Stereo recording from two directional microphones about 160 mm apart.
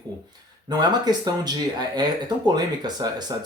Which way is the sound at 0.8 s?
25° right (ahead or behind).